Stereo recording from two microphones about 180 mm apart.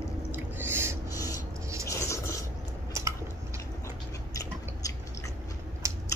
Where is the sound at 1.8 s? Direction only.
15° left (ahead or behind).